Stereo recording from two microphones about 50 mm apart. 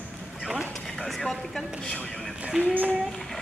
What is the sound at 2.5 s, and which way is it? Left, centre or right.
Speech, centre.